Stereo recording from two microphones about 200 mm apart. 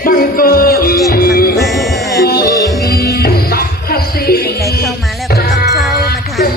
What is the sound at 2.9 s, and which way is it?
Music, 50° left (ahead or behind).